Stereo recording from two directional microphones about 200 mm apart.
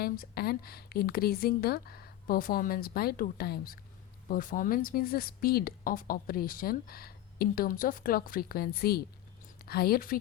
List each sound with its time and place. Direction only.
0.0 s speech: 50° left (ahead or behind)